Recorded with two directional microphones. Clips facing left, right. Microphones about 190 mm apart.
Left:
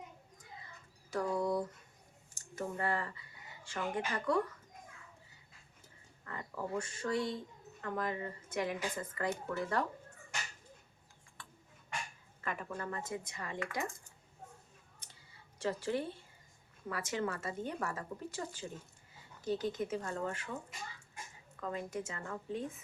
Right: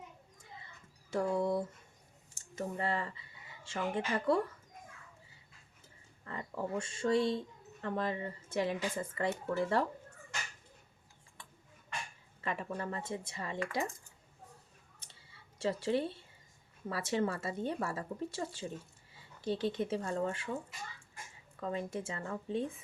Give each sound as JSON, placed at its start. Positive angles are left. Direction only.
{"t": 1.1, "sound": "speech", "side_deg": -25}
{"t": 6.2, "sound": "speech", "side_deg": -25}
{"t": 12.4, "sound": "speech", "side_deg": -25}
{"t": 15.6, "sound": "speech", "side_deg": -25}
{"t": 21.6, "sound": "a woman's voice", "side_deg": -30}